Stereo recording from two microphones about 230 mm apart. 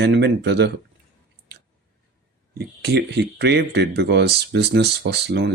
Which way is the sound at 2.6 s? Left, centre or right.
Right.